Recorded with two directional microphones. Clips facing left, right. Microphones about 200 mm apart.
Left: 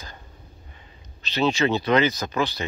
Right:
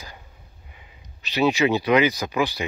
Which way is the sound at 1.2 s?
15° right (ahead or behind).